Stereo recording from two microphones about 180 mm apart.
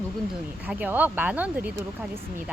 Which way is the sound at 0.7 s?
10° right (ahead or behind).